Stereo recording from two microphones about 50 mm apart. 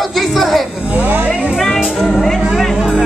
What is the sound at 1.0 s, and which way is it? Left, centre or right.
Music, right.